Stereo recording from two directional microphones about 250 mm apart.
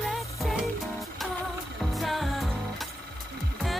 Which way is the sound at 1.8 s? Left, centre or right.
Centre.